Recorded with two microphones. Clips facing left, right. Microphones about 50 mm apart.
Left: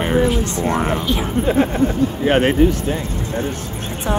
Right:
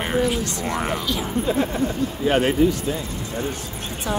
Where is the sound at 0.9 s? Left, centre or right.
Left.